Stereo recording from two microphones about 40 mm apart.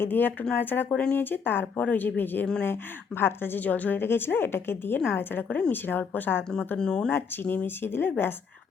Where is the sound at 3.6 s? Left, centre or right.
Left.